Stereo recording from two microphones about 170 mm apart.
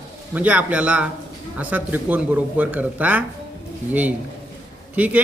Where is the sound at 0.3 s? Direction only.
10° right (ahead or behind).